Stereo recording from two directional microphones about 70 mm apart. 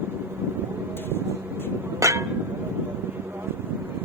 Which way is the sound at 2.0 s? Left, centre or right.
Right.